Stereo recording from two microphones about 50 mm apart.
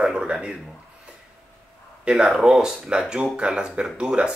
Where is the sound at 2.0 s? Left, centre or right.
Right.